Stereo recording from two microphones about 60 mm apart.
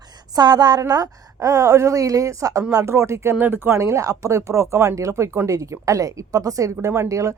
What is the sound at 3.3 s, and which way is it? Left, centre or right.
Speech, right.